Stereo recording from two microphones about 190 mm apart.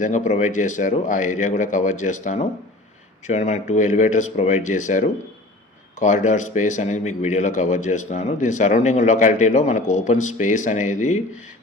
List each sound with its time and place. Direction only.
0.0 s a man's voice: 40° left (ahead or behind)